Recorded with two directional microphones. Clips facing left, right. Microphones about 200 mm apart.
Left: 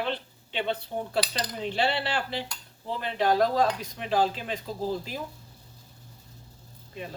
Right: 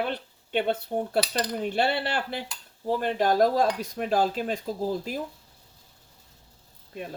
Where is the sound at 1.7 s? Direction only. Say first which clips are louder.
Right 1 dB; 50° right (ahead or behind).